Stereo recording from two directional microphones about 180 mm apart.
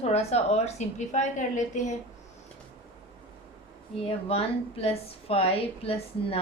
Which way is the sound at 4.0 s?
35° left (ahead or behind).